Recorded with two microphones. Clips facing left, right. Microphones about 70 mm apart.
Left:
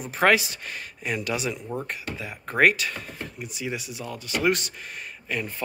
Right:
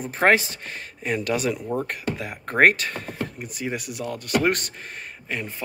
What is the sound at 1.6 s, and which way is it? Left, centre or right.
Speech, right.